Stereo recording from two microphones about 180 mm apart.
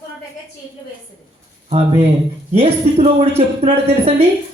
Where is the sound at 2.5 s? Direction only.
35° right (ahead or behind).